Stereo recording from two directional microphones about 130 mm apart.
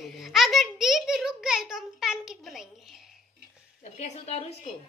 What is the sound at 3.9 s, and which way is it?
Speech, 55° left (ahead or behind).